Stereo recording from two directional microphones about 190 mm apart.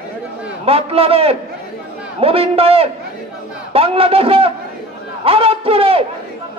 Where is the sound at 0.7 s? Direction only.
30° right (ahead or behind).